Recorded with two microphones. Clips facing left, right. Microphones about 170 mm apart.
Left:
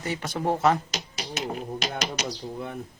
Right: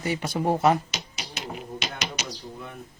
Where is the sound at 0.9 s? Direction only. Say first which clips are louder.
Left 3 dB; 35° left (ahead or behind).